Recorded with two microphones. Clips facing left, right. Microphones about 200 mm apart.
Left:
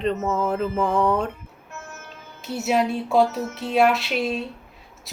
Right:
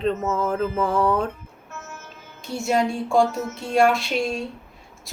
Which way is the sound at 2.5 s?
5° left (ahead or behind).